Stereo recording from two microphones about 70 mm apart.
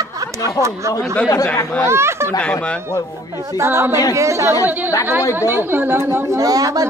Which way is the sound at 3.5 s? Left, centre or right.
Right.